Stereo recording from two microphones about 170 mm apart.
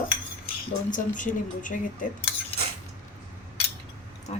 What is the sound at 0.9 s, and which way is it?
Speech, 50° left (ahead or behind).